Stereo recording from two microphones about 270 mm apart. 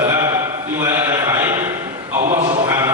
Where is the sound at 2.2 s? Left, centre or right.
Right.